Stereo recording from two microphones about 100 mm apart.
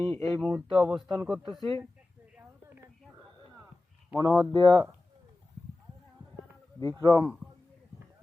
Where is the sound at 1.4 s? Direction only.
55° right (ahead or behind).